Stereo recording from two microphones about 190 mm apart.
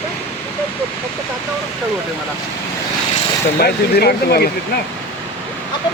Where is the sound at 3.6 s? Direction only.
60° left (ahead or behind).